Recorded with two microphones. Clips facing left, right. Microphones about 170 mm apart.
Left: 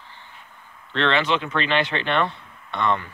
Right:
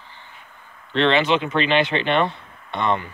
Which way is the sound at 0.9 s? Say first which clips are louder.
Right 4 dB; 20° right (ahead or behind).